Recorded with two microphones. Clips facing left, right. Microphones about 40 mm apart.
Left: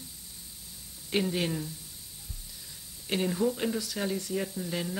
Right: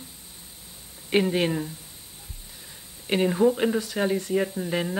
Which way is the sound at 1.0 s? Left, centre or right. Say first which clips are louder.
Right 7 dB; right.